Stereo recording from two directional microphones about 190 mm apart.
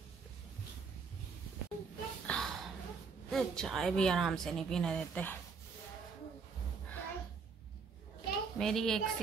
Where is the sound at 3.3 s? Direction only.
Centre (ahead or behind).